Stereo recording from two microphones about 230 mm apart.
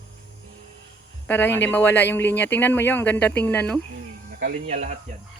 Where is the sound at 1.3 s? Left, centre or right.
Centre.